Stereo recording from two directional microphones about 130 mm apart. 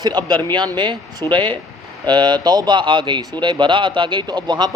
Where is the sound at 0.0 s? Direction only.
30° right (ahead or behind).